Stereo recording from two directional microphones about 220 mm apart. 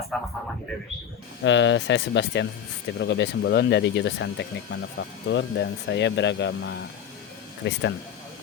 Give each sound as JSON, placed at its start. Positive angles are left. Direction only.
{"t": 0.1, "sound": "a man's voice", "side_deg": 0}
{"t": 1.5, "sound": "speech", "side_deg": 55}